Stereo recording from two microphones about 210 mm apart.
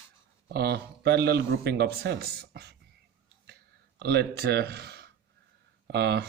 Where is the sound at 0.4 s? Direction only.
50° right (ahead or behind).